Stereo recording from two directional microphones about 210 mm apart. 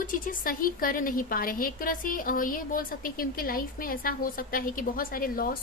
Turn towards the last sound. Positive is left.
turn(degrees=45)  # may be behind; listen again after turning